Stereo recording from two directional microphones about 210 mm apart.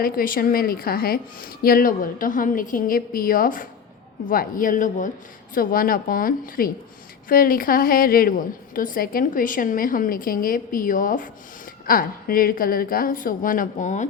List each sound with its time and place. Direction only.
0.0 s a woman's voice: 45° left (ahead or behind)